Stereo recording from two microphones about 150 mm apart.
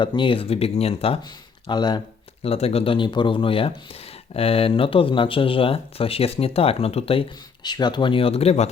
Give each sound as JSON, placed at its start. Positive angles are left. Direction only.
{"t": 0.0, "sound": "speech", "side_deg": 35}
{"t": 1.6, "sound": "speech", "side_deg": 30}
{"t": 2.4, "sound": "speech", "side_deg": 40}